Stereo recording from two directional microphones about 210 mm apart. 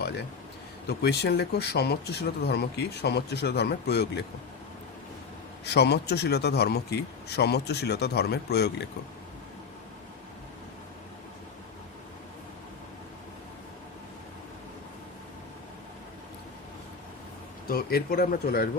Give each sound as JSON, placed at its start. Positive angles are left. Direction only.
{"t": 0.0, "sound": "a sound", "side_deg": 50}
{"t": 0.9, "sound": "speech", "side_deg": 50}
{"t": 5.6, "sound": "speech", "side_deg": 50}
{"t": 17.7, "sound": "speech", "side_deg": 45}